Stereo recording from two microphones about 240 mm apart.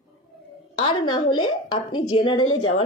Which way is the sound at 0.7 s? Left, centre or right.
Centre.